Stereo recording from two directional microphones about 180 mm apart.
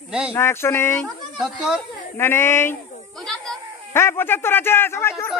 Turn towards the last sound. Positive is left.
turn(degrees=15)  # may be behind; listen again after turning